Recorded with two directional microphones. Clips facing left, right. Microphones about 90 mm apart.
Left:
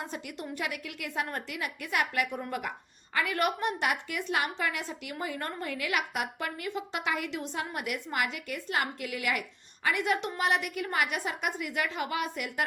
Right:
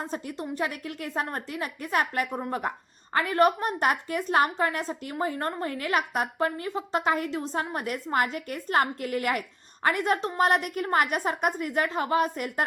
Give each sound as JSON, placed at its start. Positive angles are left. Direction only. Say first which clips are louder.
{"t": 0.0, "sound": "a woman's voice", "louder": "right 5 dB", "side_deg": -35}